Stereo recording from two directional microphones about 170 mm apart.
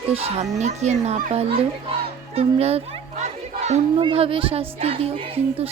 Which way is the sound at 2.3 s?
35° right (ahead or behind).